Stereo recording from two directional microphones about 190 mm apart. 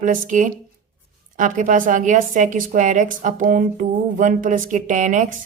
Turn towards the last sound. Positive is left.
turn(degrees=-40)  # may be behind; listen again after turning